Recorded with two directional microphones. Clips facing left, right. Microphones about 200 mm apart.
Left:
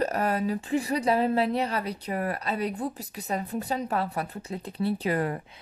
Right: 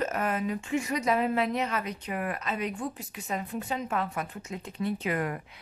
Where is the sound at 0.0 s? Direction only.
35° left (ahead or behind).